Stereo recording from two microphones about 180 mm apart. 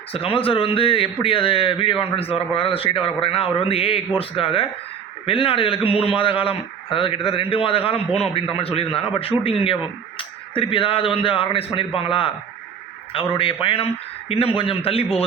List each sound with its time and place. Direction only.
0.1 s a man's voice: 30° left (ahead or behind)